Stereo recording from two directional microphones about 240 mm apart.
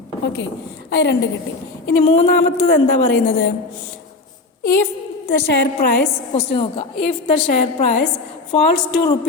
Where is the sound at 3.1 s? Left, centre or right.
Left.